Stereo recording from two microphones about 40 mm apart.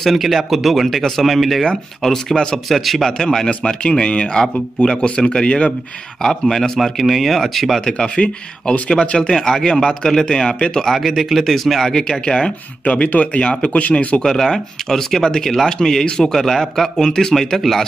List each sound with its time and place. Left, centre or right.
0.0 s a man's voice: centre
2.3 s speech: centre
2.7 s speech: centre
3.1 s a man's voice: centre
3.9 s speech: left
6.5 s a man's voice: centre
6.8 s speech: centre
8.2 s speech: left
9.3 s a man's voice: centre
11.0 s speech: centre
11.9 s speech: centre
12.8 s speech: left
14.2 s a man's voice: centre
16.9 s a man's voice: centre